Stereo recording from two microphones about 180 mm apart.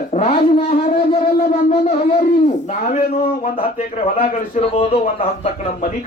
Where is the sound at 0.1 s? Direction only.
40° left (ahead or behind).